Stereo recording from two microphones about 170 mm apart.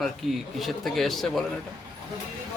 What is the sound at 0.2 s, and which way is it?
A woman's voice, centre (ahead or behind).